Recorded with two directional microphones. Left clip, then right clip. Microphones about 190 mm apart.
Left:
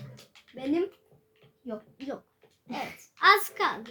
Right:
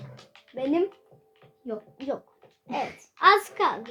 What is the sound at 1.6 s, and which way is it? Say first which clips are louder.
Speech: right 4 dB; 40° left (ahead or behind).